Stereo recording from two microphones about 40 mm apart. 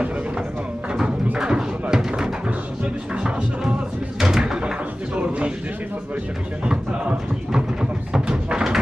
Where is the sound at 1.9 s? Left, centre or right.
Centre.